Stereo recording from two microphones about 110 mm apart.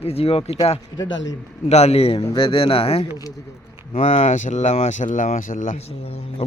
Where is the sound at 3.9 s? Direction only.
70° left (ahead or behind); by 5.4 s 90° left.